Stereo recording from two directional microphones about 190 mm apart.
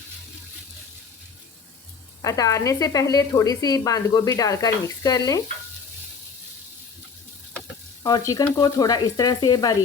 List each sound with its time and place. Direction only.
2.2 s speech: 15° left (ahead or behind)
8.0 s speech: 20° left (ahead or behind)